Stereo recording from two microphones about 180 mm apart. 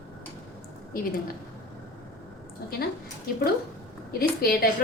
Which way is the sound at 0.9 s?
55° left (ahead or behind).